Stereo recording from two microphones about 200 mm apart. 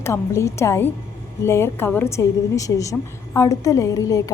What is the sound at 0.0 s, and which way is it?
A woman's voice, 15° left (ahead or behind).